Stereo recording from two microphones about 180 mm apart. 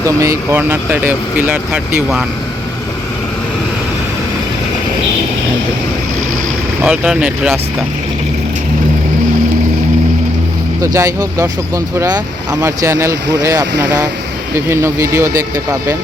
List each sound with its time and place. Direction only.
0.0 s speech: 15° right (ahead or behind)
6.8 s speech: 5° right (ahead or behind)
10.8 s speech: 15° right (ahead or behind)